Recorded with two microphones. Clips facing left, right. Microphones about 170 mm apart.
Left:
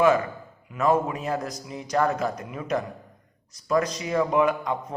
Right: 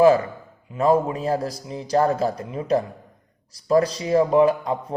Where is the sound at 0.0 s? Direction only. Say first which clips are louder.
Right 5 dB; 35° right (ahead or behind).